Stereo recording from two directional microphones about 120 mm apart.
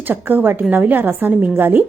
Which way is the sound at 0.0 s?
15° right (ahead or behind).